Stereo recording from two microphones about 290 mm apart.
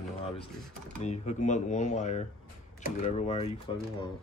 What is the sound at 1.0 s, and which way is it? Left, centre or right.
Speech, left.